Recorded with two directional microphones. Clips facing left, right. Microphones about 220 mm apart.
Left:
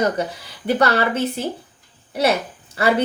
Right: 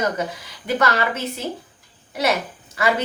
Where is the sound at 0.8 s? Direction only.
30° left (ahead or behind).